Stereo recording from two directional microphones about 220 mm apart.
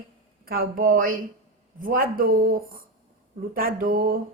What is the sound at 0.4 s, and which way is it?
A woman's voice, 40° right (ahead or behind).